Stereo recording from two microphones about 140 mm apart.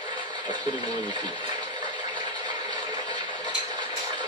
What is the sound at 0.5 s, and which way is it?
Speech, 35° right (ahead or behind).